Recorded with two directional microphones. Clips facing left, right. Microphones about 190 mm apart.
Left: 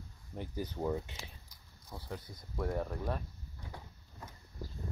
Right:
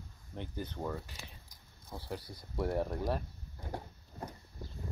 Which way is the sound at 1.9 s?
Centre (ahead or behind).